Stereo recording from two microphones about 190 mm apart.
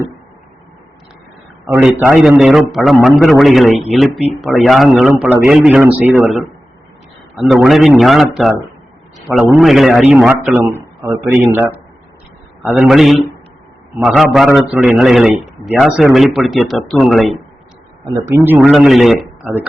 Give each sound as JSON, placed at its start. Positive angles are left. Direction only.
{"t": 1.6, "sound": "a man's voice", "side_deg": -5}
{"t": 9.6, "sound": "a man's voice", "side_deg": 0}
{"t": 12.7, "sound": "a man's voice", "side_deg": 0}
{"t": 18.0, "sound": "speech", "side_deg": -15}
{"t": 18.7, "sound": "a man's voice", "side_deg": 0}